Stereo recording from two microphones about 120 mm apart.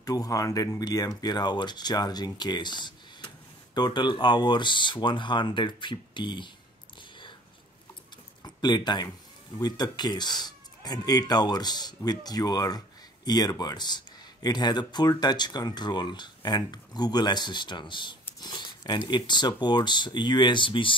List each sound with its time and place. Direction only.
0.0 s speech: 30° left (ahead or behind)
8.5 s speech: 35° left (ahead or behind)